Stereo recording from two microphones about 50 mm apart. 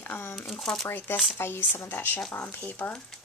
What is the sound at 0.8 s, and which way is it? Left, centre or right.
Speech, left.